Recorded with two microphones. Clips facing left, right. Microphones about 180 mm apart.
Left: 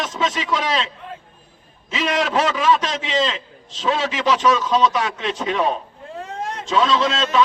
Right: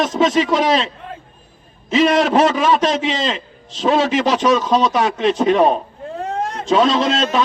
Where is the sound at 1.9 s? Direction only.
40° right (ahead or behind).